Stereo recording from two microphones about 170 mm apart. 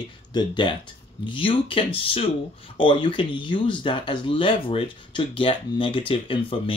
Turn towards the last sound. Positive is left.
turn(degrees=30)  # may be behind; listen again after turning